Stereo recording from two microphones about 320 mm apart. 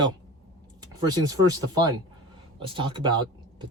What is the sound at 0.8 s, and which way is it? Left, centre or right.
Speech, centre.